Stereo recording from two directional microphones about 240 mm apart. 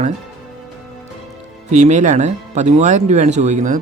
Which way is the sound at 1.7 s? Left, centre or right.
Right.